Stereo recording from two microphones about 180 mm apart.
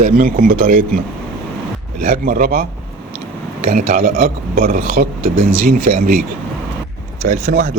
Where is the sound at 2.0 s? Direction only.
50° right (ahead or behind).